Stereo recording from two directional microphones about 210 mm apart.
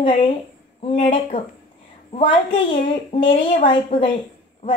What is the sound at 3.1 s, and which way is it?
Speech, 25° left (ahead or behind).